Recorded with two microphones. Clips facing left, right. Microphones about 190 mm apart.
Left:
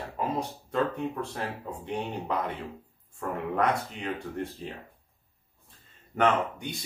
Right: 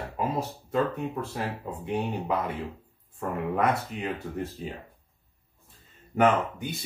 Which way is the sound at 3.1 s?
5° right (ahead or behind).